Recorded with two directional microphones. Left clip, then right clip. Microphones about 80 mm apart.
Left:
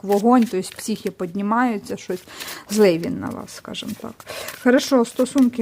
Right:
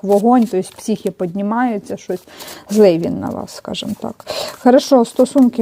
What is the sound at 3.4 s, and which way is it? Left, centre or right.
Speech, right.